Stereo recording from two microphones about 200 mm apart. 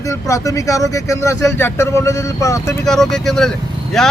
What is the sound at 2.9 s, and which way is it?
Speech, centre (ahead or behind).